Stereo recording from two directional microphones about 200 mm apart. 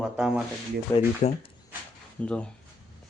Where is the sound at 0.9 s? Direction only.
25° left (ahead or behind).